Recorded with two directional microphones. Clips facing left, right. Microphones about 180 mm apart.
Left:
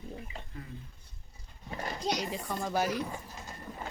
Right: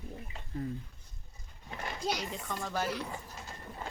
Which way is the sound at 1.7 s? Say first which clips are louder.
Left 2 dB; 40° left (ahead or behind).